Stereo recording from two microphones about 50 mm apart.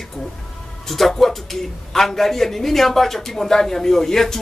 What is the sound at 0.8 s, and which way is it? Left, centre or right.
A man's voice, centre.